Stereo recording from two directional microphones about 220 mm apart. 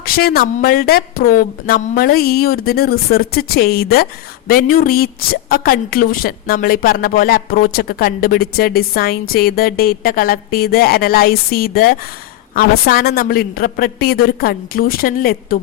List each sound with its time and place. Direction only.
0.0 s a woman's voice: 45° left (ahead or behind)